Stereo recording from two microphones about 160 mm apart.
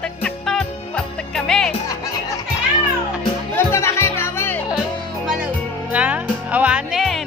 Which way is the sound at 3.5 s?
15° left (ahead or behind).